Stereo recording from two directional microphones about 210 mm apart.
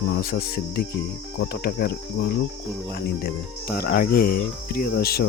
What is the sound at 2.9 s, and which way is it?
Cricket, 50° left (ahead or behind).